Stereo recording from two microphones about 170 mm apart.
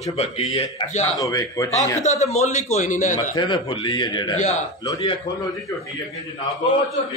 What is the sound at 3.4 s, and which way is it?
Speech, 30° left (ahead or behind).